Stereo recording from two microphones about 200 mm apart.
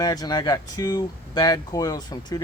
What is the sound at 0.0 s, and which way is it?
Speech, 20° left (ahead or behind).